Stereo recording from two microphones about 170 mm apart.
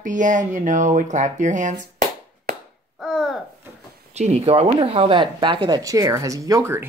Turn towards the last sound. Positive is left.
turn(degrees=-15)  # may be behind; listen again after turning